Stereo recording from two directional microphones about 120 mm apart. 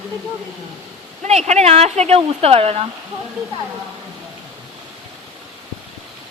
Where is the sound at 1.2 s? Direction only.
65° right (ahead or behind).